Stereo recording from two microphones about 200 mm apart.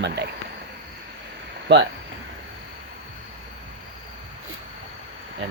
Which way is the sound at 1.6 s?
60° right (ahead or behind).